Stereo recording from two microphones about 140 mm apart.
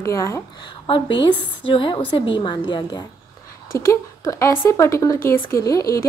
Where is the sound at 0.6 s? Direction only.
35° left (ahead or behind).